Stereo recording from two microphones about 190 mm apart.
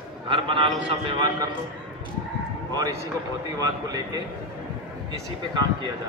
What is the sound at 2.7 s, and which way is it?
Speech, 20° right (ahead or behind).